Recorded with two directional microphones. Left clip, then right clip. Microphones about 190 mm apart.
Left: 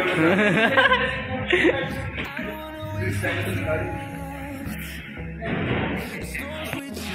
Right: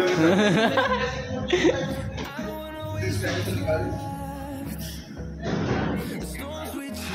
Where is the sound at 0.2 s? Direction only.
15° right (ahead or behind).